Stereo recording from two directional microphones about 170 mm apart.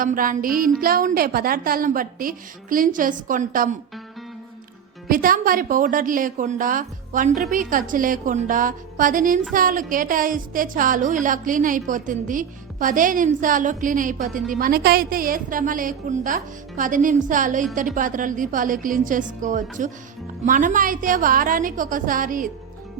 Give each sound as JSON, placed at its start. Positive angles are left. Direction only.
{"t": 0.0, "sound": "a woman's voice", "side_deg": -55}
{"t": 5.0, "sound": "a woman's voice", "side_deg": -55}